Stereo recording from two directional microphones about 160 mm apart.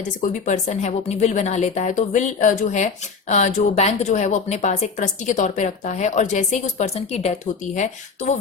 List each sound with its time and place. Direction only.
0.2 s a woman's voice: 50° left (ahead or behind)